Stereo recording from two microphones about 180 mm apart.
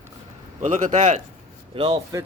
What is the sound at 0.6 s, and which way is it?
Speech, 45° right (ahead or behind).